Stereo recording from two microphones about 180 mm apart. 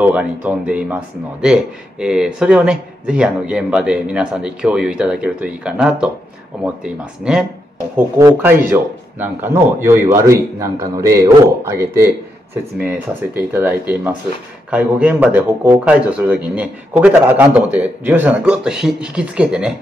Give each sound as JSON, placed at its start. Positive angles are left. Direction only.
{"t": 0.0, "sound": "a man's voice", "side_deg": -5}
{"t": 12.8, "sound": "a man's voice", "side_deg": -10}